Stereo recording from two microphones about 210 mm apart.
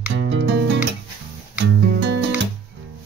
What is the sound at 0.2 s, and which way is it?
Music, 60° right (ahead or behind).